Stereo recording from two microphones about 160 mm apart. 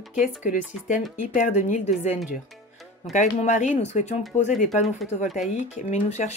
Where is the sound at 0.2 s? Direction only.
55° left (ahead or behind).